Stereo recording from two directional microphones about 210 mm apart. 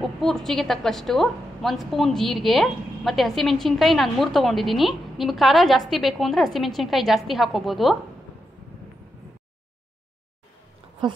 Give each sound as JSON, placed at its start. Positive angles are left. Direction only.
{"t": 0.0, "sound": "a woman's voice", "side_deg": 0}
{"t": 11.0, "sound": "speech", "side_deg": -20}